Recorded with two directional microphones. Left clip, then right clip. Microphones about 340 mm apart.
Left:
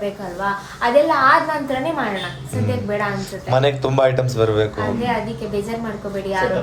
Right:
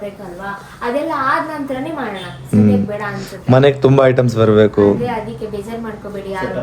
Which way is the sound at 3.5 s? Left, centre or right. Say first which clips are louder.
Right 6 dB; right.